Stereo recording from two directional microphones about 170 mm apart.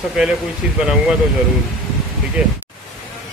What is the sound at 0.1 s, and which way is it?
Speech, 5° right (ahead or behind).